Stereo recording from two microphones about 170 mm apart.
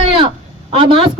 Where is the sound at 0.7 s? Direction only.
30° right (ahead or behind).